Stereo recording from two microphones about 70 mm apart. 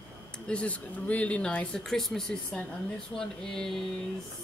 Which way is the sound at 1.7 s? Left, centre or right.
Centre.